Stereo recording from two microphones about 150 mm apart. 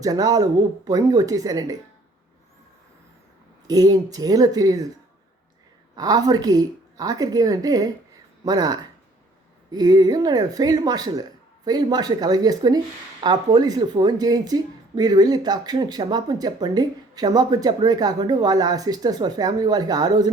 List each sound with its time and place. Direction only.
0.0 s speech: 25° right (ahead or behind)
3.7 s speech: 25° right (ahead or behind)
6.0 s speech: 25° right (ahead or behind)